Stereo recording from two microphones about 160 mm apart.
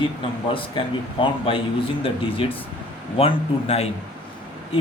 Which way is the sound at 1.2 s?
35° left (ahead or behind).